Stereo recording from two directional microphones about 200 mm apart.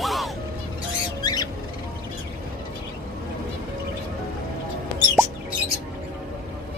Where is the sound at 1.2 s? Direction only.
20° left (ahead or behind).